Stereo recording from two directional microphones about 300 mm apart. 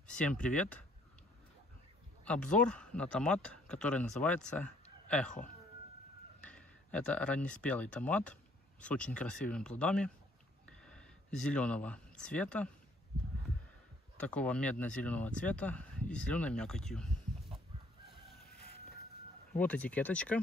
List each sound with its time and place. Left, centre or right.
0.0 s speech: centre
2.2 s speech: centre
6.4 s speech: centre
10.7 s a sound: centre
14.1 s speech: centre
18.0 s chicken: left
19.6 s speech: centre